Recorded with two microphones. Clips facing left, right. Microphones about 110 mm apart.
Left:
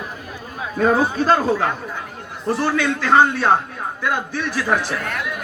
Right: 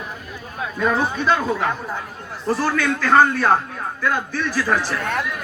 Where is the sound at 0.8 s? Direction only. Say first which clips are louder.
Left 4 dB; 40° left (ahead or behind).